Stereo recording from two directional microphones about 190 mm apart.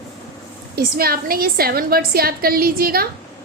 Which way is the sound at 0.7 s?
55° right (ahead or behind).